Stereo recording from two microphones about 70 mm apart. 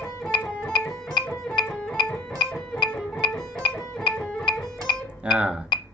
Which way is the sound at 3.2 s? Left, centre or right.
Left.